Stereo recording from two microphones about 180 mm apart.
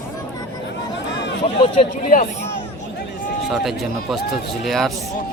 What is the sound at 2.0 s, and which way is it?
Speech, 45° left (ahead or behind).